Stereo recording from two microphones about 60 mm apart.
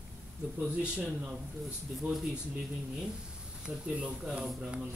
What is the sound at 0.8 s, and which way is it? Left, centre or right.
Speech, right.